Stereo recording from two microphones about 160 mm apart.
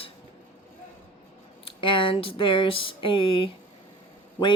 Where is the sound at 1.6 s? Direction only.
30° left (ahead or behind).